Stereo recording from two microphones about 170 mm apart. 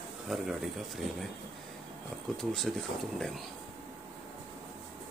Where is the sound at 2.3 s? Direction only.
Centre (ahead or behind).